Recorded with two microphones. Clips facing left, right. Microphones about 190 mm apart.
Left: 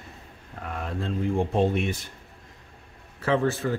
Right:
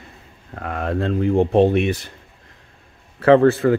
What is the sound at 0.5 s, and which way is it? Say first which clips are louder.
Speech: right 9 dB; 80° right.